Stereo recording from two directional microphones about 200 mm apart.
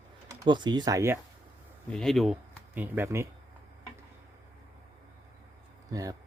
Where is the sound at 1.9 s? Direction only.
Centre (ahead or behind).